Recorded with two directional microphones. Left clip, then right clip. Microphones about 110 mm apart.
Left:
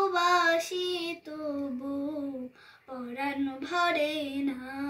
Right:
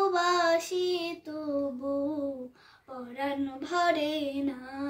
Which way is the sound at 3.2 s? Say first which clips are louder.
Even; 35° right (ahead or behind).